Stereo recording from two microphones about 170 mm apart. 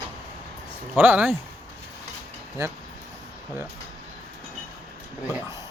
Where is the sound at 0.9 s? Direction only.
10° right (ahead or behind).